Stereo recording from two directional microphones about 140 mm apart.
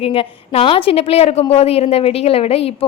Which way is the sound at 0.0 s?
45° left (ahead or behind).